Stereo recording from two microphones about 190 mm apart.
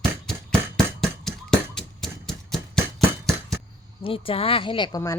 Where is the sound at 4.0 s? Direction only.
30° left (ahead or behind).